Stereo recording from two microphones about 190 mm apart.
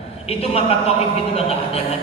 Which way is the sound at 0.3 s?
30° left (ahead or behind).